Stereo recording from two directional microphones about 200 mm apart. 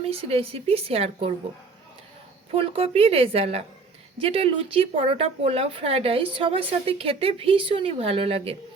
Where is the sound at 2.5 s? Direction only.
30° right (ahead or behind).